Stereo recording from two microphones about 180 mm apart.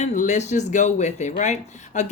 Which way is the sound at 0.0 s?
40° left (ahead or behind).